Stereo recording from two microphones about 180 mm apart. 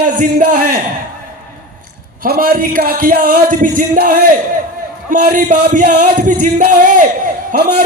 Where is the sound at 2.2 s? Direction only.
55° right (ahead or behind).